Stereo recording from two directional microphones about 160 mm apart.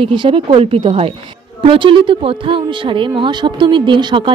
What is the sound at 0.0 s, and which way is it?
A woman's voice, 30° right (ahead or behind).